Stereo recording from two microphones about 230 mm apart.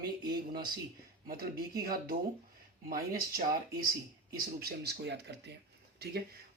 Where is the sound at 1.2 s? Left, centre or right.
Right.